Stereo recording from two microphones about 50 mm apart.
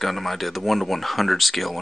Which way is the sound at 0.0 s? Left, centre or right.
Centre.